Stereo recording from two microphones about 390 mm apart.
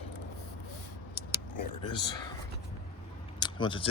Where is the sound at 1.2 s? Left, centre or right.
Left.